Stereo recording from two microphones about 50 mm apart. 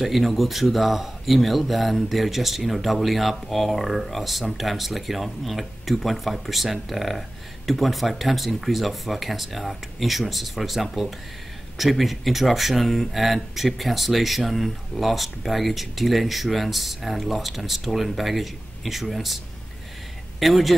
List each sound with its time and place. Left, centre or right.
0.0 s a man's voice: centre